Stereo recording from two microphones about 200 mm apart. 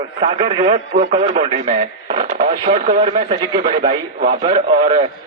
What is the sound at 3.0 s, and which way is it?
A man's voice, 25° right (ahead or behind).